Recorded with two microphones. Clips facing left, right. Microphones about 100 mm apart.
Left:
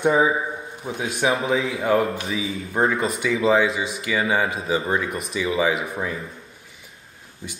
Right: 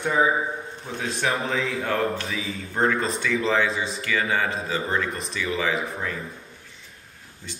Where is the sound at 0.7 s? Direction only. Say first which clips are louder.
Left 2 dB; 10° left (ahead or behind).